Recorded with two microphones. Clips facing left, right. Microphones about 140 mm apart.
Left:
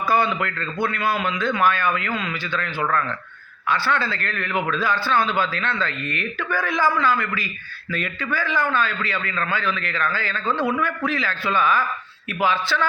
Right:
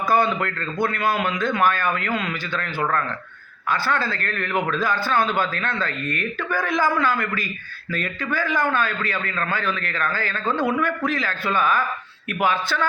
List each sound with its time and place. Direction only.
0.1 s a man's voice: 45° right (ahead or behind)